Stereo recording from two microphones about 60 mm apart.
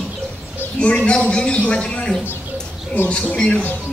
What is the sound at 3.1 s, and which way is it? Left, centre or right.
Speech, centre.